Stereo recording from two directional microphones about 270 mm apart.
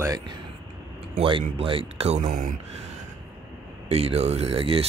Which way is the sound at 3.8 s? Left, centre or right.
Right.